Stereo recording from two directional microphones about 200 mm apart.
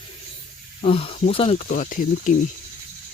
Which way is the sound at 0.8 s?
30° left (ahead or behind).